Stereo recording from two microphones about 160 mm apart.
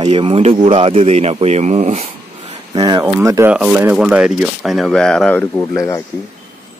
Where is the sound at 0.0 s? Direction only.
30° right (ahead or behind).